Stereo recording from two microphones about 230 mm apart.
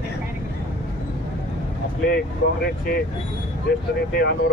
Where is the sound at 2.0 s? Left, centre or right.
Left.